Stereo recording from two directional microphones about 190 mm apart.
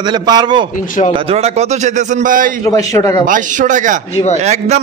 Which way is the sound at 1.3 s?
35° right (ahead or behind).